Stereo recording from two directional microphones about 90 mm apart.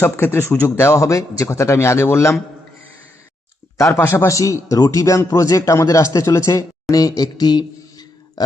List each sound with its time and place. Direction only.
0.0 s speech: 25° left (ahead or behind)
3.9 s speech: 25° left (ahead or behind); by 8.4 s 50° left (ahead or behind)